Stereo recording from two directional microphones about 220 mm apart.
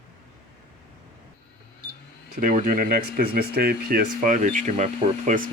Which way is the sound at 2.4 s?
40° right (ahead or behind).